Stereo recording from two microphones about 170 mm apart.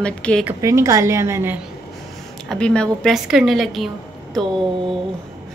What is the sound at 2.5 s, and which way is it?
A woman's voice, 5° left (ahead or behind).